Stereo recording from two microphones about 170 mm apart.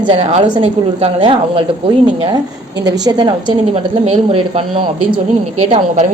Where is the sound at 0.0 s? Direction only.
35° right (ahead or behind).